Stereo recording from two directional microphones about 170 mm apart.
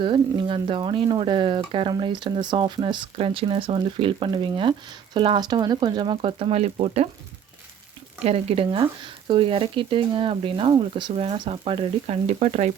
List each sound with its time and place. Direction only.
0.0 s speech: 30° right (ahead or behind)
8.2 s speech: 35° right (ahead or behind)